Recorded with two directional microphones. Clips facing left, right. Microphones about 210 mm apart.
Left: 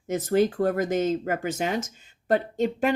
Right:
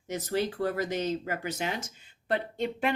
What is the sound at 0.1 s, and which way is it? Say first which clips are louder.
Speech: left 8 dB; 50° left (ahead or behind).